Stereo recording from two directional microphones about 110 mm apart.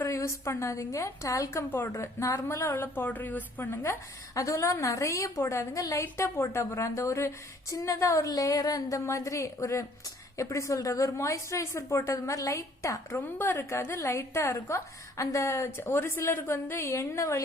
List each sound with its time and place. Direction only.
0.0 s a woman's voice: 25° left (ahead or behind)
4.4 s a woman's voice: 30° left (ahead or behind)